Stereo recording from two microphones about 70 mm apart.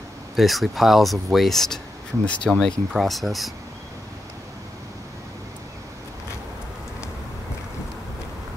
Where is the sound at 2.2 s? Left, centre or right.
Centre.